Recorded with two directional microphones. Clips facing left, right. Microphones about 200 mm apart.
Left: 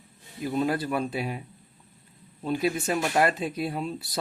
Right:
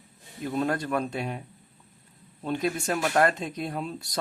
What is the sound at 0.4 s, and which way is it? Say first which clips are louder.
Speech: left 1 dB; 5° left (ahead or behind).